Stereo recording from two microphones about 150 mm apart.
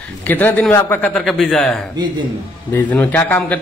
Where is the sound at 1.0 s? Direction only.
5° left (ahead or behind).